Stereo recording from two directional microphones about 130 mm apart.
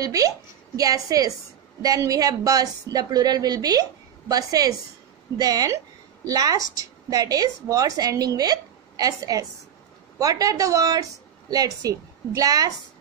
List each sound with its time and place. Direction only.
0.0 s a woman's voice: 25° right (ahead or behind)